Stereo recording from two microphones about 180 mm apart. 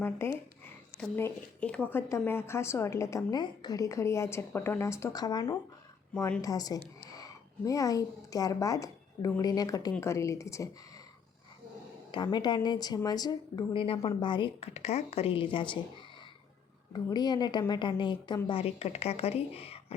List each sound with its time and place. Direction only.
0.0 s a woman's voice: 10° left (ahead or behind)
6.1 s a woman's voice: 10° left (ahead or behind)
6.4 s a woman's voice: 20° left (ahead or behind)
12.1 s speech: 25° left (ahead or behind)
16.9 s a woman's voice: 25° left (ahead or behind)